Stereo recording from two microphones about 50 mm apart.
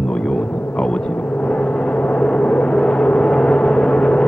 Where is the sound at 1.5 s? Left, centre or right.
Left.